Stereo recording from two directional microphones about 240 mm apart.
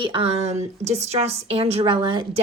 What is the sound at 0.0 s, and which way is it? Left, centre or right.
A woman's voice, right.